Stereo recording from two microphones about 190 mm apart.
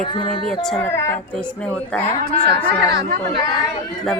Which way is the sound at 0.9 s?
15° left (ahead or behind).